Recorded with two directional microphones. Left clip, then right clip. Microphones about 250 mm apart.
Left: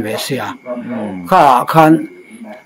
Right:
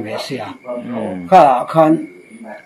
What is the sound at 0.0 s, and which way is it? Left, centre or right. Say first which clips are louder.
Speech: left 4 dB; left.